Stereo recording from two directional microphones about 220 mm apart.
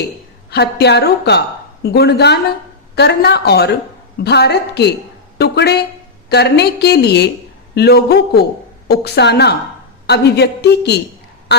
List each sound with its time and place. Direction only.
0.5 s speech: 50° left (ahead or behind)